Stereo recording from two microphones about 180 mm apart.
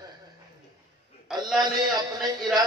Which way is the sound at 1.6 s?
20° right (ahead or behind).